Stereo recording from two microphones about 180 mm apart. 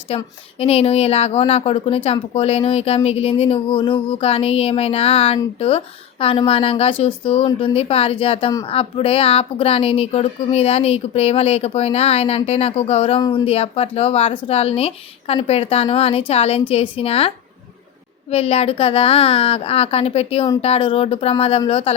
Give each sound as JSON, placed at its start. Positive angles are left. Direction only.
{"t": 0.6, "sound": "speech", "side_deg": 35}